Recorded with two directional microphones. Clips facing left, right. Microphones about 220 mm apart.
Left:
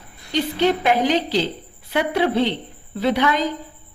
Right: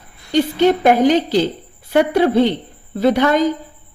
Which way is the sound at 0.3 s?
45° right (ahead or behind).